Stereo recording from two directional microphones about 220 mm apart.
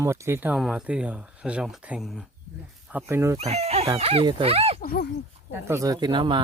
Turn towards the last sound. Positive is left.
turn(degrees=-20)  # may be behind; listen again after turning